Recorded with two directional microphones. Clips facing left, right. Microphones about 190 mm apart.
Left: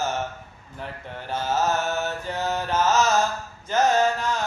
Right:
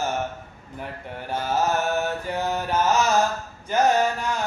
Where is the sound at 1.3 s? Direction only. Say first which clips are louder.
Even; 15° right (ahead or behind).